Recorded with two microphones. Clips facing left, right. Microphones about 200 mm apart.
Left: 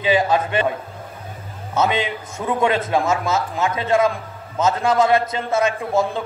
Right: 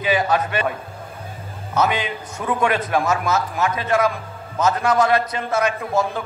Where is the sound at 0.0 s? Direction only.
25° left (ahead or behind).